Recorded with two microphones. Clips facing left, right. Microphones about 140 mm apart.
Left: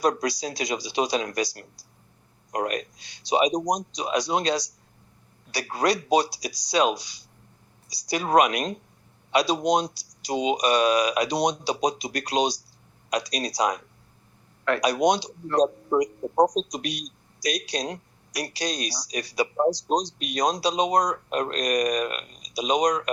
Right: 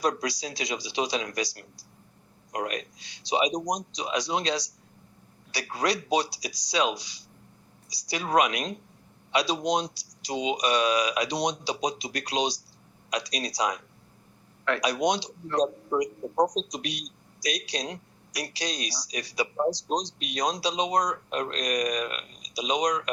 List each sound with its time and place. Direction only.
0.0 s speech: 45° left (ahead or behind)